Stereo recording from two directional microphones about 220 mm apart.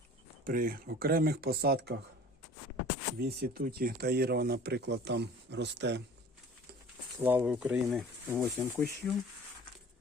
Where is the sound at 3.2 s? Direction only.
45° right (ahead or behind).